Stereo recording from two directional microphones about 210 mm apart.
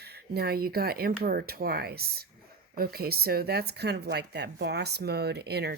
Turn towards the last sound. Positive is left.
turn(degrees=-50)  # may be behind; listen again after turning